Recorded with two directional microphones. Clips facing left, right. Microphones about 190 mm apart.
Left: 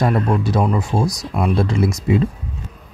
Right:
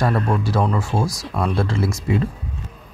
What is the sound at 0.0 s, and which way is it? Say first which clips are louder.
Speech: left 2 dB; 15° left (ahead or behind).